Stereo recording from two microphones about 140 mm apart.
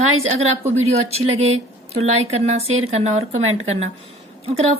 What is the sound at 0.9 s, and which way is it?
A woman's voice, 50° right (ahead or behind).